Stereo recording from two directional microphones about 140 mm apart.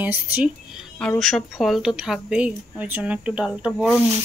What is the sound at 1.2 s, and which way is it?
Speech, centre (ahead or behind).